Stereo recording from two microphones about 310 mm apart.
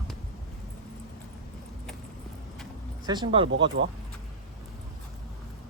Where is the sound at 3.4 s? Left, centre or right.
Right.